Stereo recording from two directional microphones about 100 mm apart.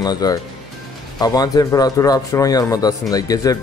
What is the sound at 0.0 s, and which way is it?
Speech, 40° left (ahead or behind).